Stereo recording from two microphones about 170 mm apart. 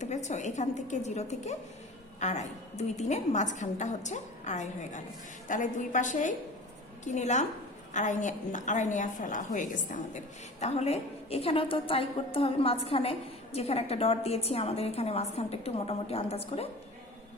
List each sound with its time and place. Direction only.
0.0 s a woman's voice: 45° left (ahead or behind)